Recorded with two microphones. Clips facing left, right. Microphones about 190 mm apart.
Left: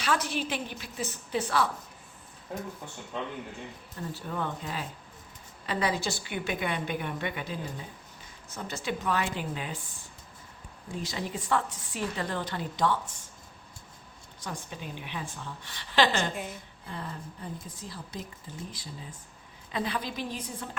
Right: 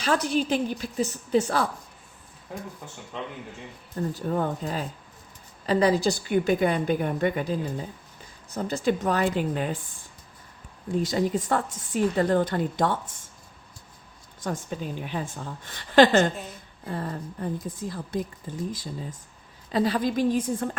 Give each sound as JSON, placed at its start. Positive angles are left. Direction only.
{"t": 0.0, "sound": "a woman's voice", "side_deg": -40}
{"t": 4.0, "sound": "a woman's voice", "side_deg": -45}
{"t": 10.9, "sound": "a woman's voice", "side_deg": -45}
{"t": 14.4, "sound": "a woman's voice", "side_deg": -45}
{"t": 19.7, "sound": "a woman's voice", "side_deg": -40}